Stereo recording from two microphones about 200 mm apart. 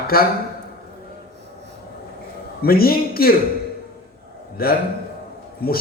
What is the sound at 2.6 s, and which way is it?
Speech, 50° left (ahead or behind).